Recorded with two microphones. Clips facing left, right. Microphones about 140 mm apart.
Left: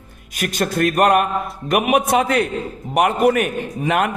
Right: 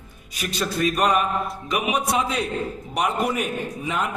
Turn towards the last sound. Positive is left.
turn(degrees=70)  # may be behind; listen again after turning